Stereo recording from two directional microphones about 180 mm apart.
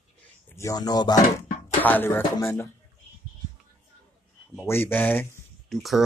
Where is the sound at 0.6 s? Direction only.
20° left (ahead or behind).